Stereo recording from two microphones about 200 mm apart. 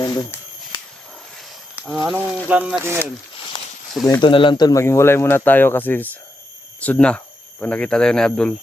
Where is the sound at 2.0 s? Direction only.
5° right (ahead or behind).